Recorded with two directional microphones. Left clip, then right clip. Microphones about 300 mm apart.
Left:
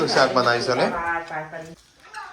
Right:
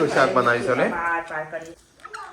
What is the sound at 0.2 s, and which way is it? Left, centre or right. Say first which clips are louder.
Speech: left 1 dB; centre.